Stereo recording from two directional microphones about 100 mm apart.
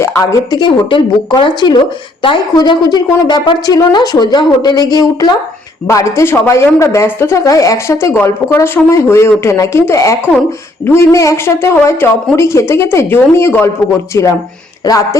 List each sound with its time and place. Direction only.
0.0 s speech: 30° left (ahead or behind)
0.6 s a woman's voice: 55° left (ahead or behind); by 15.2 s 35° left (ahead or behind)